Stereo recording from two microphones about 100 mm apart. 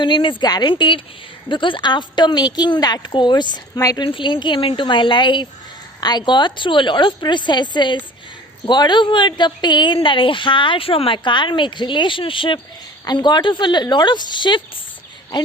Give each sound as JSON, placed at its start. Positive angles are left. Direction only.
{"t": 0.0, "sound": "a woman's voice", "side_deg": 55}
{"t": 3.8, "sound": "speech", "side_deg": 35}
{"t": 4.0, "sound": "a woman's voice", "side_deg": 55}
{"t": 13.1, "sound": "a woman's voice", "side_deg": 45}